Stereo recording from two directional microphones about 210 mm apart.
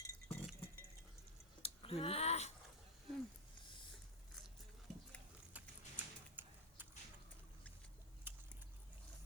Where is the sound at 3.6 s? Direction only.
25° left (ahead or behind).